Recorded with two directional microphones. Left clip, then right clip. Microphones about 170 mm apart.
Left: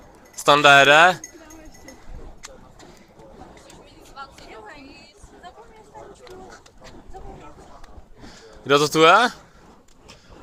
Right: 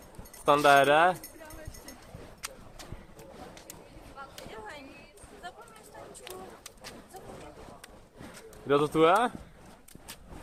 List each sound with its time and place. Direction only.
0.4 s speech: 15° left (ahead or behind)
4.2 s a sound: 15° left (ahead or behind)
8.6 s speech: 15° left (ahead or behind)